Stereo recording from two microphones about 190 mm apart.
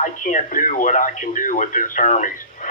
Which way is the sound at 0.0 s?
45° left (ahead or behind).